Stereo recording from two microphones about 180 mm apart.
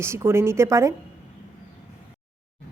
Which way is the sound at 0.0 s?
15° right (ahead or behind).